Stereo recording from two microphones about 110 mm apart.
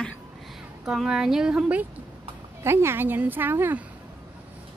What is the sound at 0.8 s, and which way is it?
A woman's voice, 5° right (ahead or behind).